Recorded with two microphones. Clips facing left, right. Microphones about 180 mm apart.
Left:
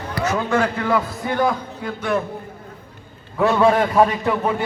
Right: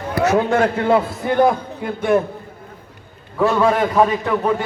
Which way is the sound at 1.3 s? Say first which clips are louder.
Right 5 dB; 55° right (ahead or behind).